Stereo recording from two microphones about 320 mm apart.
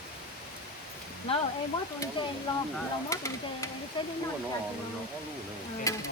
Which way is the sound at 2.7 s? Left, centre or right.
Centre.